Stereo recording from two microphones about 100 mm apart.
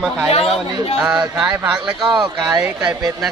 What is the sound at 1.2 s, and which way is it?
A man's voice, 15° right (ahead or behind).